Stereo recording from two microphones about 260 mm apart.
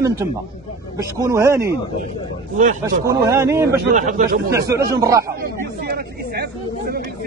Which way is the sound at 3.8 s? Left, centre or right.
Right.